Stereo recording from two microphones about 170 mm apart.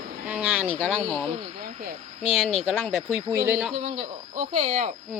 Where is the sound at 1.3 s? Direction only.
35° right (ahead or behind).